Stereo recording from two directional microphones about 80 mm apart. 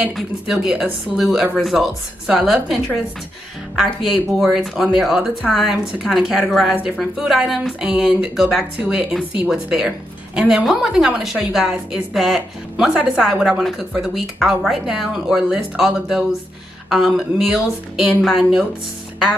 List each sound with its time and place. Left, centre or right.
0.1 s speech: centre
8.7 s speech: centre